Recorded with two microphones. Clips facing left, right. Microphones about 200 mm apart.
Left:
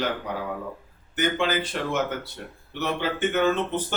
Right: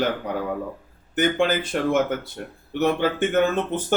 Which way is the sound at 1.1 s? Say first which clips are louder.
Right 4 dB; 50° right (ahead or behind).